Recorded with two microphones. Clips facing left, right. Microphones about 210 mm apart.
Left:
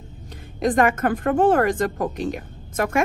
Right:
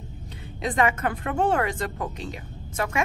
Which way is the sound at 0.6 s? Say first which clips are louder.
Left 5 dB; 50° left (ahead or behind).